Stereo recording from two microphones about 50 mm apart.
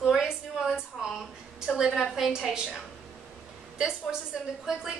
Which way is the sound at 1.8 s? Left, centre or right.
Centre.